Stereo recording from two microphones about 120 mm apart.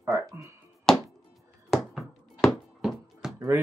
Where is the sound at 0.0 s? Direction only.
20° right (ahead or behind).